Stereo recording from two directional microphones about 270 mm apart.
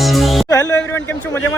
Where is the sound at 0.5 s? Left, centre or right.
Centre.